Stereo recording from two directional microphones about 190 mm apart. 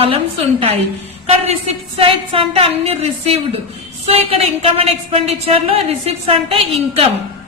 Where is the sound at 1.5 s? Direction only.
30° right (ahead or behind).